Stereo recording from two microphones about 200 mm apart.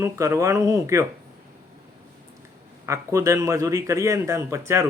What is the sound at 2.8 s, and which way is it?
A man's voice, 15° right (ahead or behind).